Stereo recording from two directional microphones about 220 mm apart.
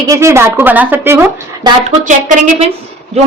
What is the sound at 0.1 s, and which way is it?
Speech, 10° right (ahead or behind).